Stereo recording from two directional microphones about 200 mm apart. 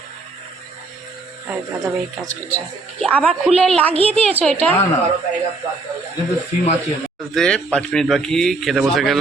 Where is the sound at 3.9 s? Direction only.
30° right (ahead or behind).